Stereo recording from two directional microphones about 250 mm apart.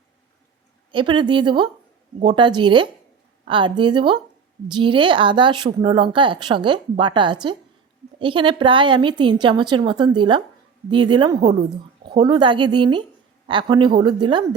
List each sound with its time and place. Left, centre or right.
0.9 s a woman's voice: centre